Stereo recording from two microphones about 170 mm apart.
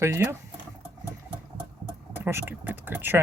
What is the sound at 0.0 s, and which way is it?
Speech, 15° right (ahead or behind).